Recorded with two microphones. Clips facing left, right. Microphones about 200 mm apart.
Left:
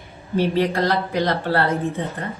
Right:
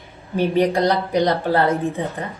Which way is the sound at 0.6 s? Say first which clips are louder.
Right 2 dB; 15° right (ahead or behind).